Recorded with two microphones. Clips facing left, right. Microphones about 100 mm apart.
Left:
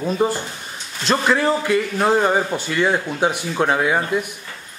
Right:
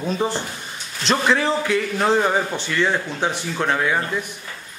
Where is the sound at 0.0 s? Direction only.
5° left (ahead or behind).